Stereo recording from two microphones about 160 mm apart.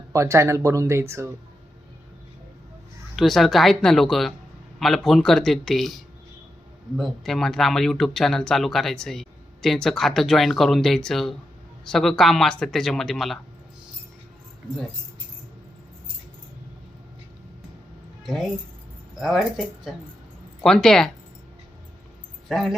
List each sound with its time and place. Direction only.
0.1 s speech: 20° right (ahead or behind)
3.2 s speech: centre (ahead or behind)
6.9 s speech: centre (ahead or behind)
19.1 s speech: centre (ahead or behind)
22.4 s speech: centre (ahead or behind)